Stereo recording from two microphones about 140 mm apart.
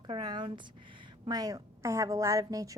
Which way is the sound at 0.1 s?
30° right (ahead or behind).